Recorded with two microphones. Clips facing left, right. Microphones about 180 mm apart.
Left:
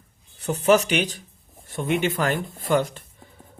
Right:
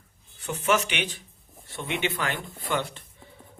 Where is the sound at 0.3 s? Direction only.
40° left (ahead or behind).